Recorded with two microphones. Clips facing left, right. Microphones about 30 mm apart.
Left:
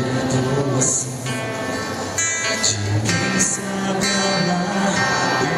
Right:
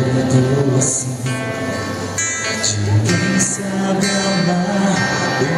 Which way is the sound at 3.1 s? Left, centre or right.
Centre.